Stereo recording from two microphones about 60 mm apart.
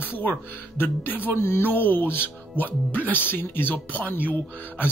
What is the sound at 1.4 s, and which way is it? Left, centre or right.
Speech, left.